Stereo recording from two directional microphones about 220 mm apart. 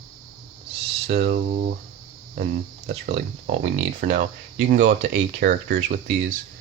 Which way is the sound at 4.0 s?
35° right (ahead or behind).